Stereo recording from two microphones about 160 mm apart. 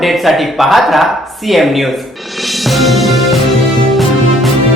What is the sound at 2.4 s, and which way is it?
Music, centre (ahead or behind).